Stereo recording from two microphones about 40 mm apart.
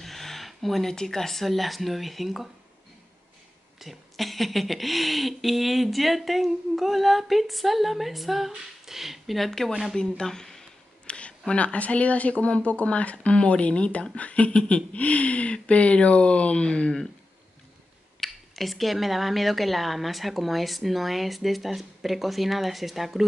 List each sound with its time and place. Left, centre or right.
0.0 s a sound: centre
0.9 s speech: centre
3.8 s speech: centre
9.9 s speech: centre
11.1 s speech: left
18.2 s speech: centre